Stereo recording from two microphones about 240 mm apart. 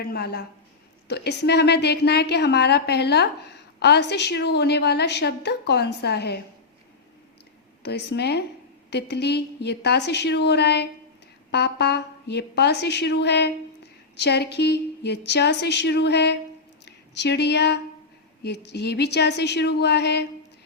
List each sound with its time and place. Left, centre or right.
0.0 s a woman's voice: left
7.8 s a woman's voice: left